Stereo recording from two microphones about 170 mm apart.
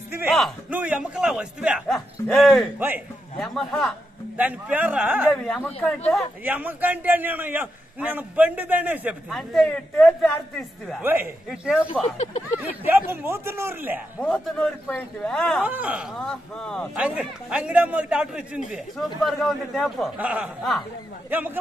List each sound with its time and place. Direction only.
0.3 s a man's voice: 5° right (ahead or behind)
4.4 s a man's voice: 10° right (ahead or behind)
5.3 s speech: 5° left (ahead or behind)
6.4 s a man's voice: 10° right (ahead or behind)
9.3 s a man's voice: centre (ahead or behind)
11.0 s a man's voice: 10° right (ahead or behind)
12.0 s speech: 40° left (ahead or behind)
12.5 s a man's voice: 10° right (ahead or behind)
14.2 s a man's voice: 5° left (ahead or behind)
15.6 s a man's voice: 10° right (ahead or behind)
16.2 s a man's voice: 5° left (ahead or behind)